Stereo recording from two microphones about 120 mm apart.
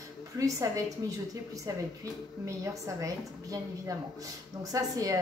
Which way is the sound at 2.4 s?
25° right (ahead or behind).